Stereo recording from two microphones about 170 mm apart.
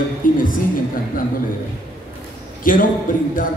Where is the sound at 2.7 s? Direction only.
55° left (ahead or behind).